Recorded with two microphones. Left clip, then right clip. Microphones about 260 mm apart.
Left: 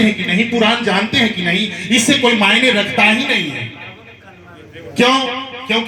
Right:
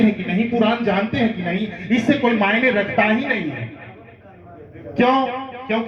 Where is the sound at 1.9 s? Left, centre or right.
Left.